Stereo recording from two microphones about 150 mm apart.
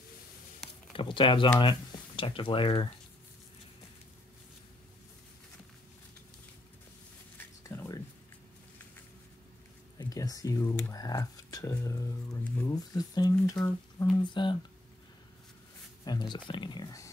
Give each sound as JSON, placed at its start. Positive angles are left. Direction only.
{"t": 0.9, "sound": "speech", "side_deg": 35}
{"t": 7.3, "sound": "a sound", "side_deg": 15}
{"t": 9.9, "sound": "speech", "side_deg": 25}
{"t": 12.7, "sound": "speech", "side_deg": 25}
{"t": 16.1, "sound": "speech", "side_deg": 30}